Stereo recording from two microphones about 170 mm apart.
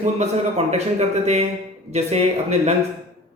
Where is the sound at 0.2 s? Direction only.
40° right (ahead or behind).